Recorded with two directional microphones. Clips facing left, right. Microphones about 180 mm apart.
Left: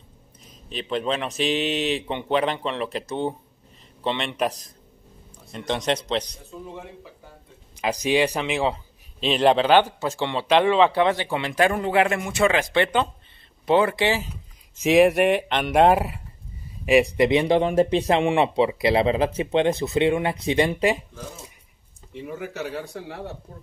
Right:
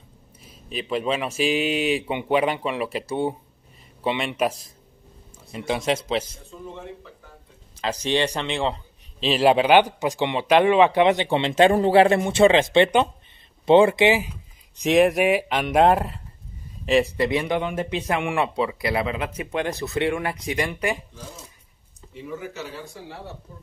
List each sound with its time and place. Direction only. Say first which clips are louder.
0.5 s speech: right 1 dB; 5° right (ahead or behind)
7.8 s speech: left 2 dB; 10° left (ahead or behind); by 14.3 s 15° right (ahead or behind)
14.8 s speech: left 1 dB; centre (ahead or behind); by 21.0 s 25° left (ahead or behind)
22.2 s speech: left 2 dB; 60° left (ahead or behind)